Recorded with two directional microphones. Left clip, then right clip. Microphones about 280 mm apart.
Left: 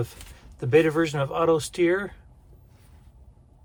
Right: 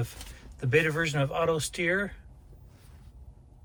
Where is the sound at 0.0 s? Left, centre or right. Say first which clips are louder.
Left 6 dB; centre.